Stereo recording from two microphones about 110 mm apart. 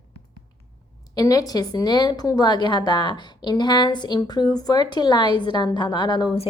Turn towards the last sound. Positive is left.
turn(degrees=40)  # may be behind; listen again after turning